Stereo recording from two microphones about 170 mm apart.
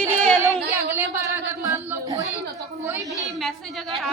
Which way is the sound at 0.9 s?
15° right (ahead or behind).